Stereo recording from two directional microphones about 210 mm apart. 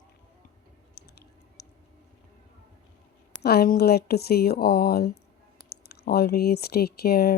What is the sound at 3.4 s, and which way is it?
Speech, 45° left (ahead or behind).